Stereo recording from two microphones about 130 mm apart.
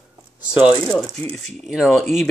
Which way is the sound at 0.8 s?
5° left (ahead or behind).